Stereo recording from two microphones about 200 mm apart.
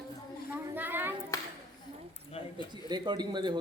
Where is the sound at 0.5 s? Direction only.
10° right (ahead or behind).